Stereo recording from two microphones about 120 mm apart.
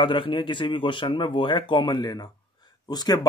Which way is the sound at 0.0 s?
45° left (ahead or behind).